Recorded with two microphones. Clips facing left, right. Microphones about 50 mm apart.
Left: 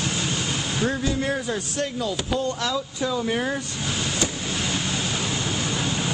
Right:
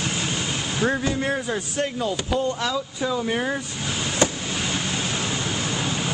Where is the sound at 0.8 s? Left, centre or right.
Right.